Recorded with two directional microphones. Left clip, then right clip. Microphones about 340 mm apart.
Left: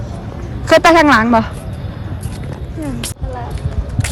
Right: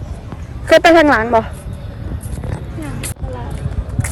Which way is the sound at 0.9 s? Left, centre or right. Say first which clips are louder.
Left 3 dB; right.